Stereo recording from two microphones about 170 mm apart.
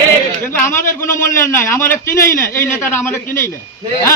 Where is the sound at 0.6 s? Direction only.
15° left (ahead or behind).